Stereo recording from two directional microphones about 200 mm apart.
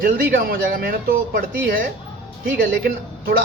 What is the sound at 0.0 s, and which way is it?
Speech, 45° right (ahead or behind).